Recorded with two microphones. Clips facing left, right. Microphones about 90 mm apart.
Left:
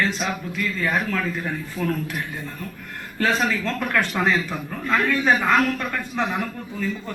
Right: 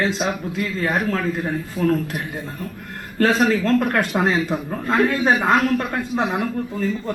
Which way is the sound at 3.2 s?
35° right (ahead or behind).